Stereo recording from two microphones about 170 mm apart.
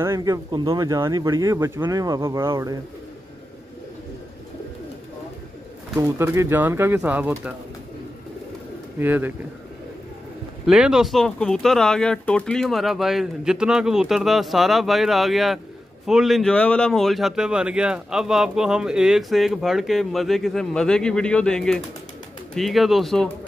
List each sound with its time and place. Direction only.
0.0 s speech: 15° right (ahead or behind)
5.9 s speech: 15° right (ahead or behind)
9.0 s speech: 10° right (ahead or behind)
10.7 s speech: 5° right (ahead or behind)